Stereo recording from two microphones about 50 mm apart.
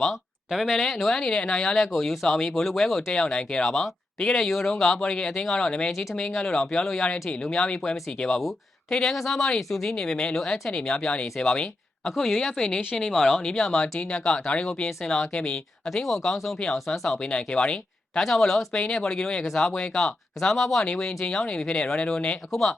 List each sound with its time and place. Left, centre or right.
0.5 s speech: centre
1.1 s speech: centre
1.8 s speech: centre
3.1 s speech: centre
3.7 s speech: centre
4.2 s speech: centre
6.1 s speech: centre
6.8 s speech: centre
12.1 s speech: centre
15.5 s speech: centre
17.2 s speech: centre
18.2 s speech: centre; by 22.4 s left